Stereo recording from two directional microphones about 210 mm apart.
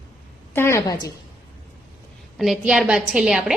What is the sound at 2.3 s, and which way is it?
A woman's voice, centre (ahead or behind).